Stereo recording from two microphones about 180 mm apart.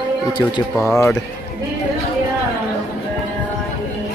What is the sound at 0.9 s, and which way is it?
Speech, 15° left (ahead or behind).